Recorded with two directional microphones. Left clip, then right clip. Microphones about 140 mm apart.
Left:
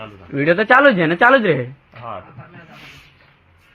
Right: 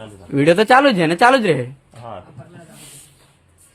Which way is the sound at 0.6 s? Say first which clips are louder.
Left 1 dB; 25° right (ahead or behind).